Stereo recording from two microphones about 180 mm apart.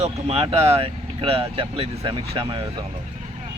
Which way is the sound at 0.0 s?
35° right (ahead or behind).